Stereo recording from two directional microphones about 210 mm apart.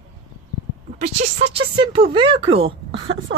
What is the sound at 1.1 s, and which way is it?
Speech, 30° right (ahead or behind).